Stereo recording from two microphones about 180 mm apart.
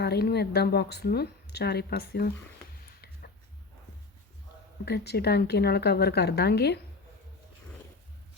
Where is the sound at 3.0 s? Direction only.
65° left (ahead or behind).